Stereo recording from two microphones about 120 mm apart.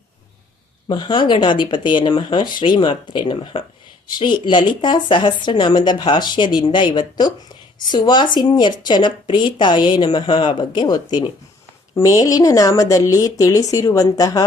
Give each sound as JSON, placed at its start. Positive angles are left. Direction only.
{"t": 0.9, "sound": "a woman's voice", "side_deg": 40}